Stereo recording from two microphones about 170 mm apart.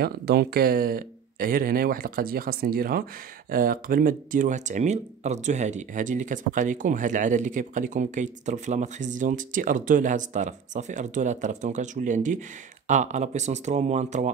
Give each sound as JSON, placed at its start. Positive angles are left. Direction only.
{"t": 0.0, "sound": "speech", "side_deg": -70}